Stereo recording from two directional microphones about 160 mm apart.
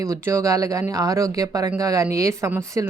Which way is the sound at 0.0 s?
20° right (ahead or behind).